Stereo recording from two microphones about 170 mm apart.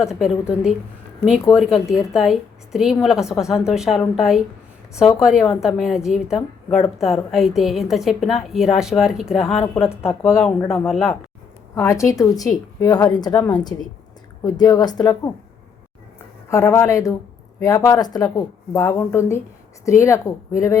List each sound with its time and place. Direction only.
0.0 s a woman's voice: centre (ahead or behind)
11.7 s speech: 20° left (ahead or behind)
16.5 s speech: 15° left (ahead or behind)